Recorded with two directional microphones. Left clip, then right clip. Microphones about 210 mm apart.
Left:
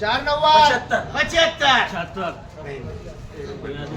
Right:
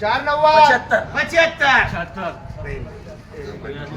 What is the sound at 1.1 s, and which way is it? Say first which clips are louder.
Speech: even; 5° right (ahead or behind).